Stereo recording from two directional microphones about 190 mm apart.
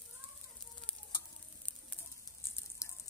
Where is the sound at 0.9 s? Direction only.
5° left (ahead or behind).